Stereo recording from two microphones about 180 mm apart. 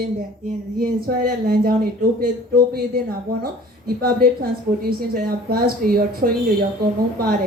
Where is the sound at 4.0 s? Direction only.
55° right (ahead or behind).